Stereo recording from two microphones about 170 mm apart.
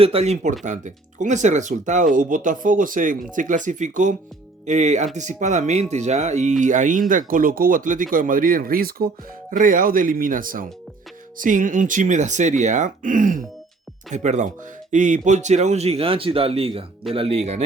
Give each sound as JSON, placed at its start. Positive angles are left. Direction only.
{"t": 0.0, "sound": "speech", "side_deg": -35}